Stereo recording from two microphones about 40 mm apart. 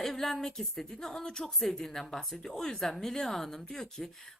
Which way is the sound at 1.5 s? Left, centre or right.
Centre.